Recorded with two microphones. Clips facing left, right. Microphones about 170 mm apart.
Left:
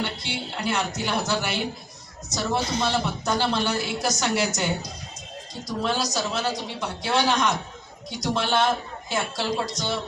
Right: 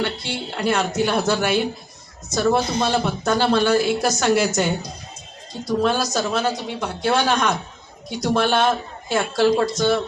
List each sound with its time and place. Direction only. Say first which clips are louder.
0.0 s speech: right 5 dB; 55° right (ahead or behind)
5.8 s speech: right 4 dB; 55° right (ahead or behind)